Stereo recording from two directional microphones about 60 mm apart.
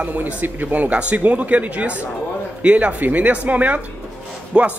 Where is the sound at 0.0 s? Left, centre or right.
Right.